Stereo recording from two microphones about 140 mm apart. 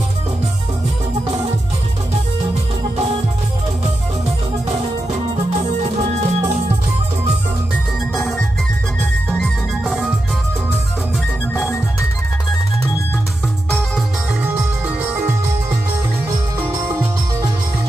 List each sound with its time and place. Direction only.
5.3 s music: 50° right (ahead or behind)
8.2 s music: centre (ahead or behind)